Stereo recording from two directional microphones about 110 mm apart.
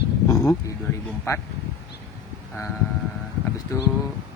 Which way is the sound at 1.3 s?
30° left (ahead or behind).